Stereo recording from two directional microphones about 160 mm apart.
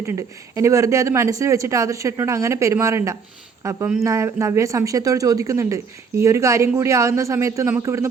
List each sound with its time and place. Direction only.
0.0 s speech: 20° right (ahead or behind)